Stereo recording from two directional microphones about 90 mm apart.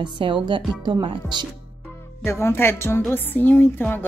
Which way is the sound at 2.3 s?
30° left (ahead or behind).